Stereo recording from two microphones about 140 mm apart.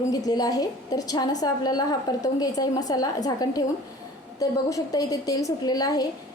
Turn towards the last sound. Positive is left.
turn(degrees=25)  # may be behind; listen again after turning